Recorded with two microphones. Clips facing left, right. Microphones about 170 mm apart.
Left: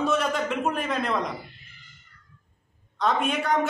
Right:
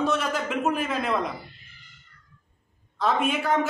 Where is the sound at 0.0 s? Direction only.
Centre (ahead or behind).